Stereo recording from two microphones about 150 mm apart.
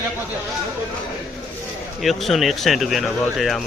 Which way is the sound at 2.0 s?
Centre (ahead or behind).